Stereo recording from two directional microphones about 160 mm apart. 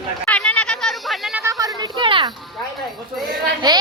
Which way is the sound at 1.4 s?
20° right (ahead or behind).